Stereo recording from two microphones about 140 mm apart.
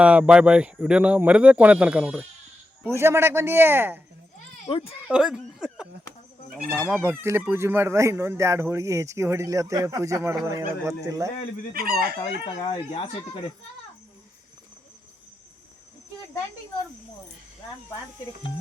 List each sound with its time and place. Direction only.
0.0 s speech: 10° right (ahead or behind)
2.9 s speech: 20° right (ahead or behind)
4.7 s speech: 40° left (ahead or behind)
5.0 s speech: 5° right (ahead or behind)
6.9 s speech: 15° right (ahead or behind)
11.7 s chicken: 90° right
12.5 s speech: 35° left (ahead or behind)